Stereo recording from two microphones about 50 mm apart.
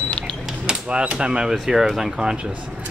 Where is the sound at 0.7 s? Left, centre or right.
Right.